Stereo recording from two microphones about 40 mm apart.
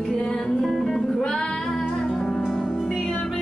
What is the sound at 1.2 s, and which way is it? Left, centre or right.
Music, centre.